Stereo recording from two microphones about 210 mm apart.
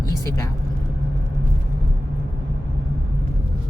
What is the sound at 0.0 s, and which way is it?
Vehicle, 15° left (ahead or behind).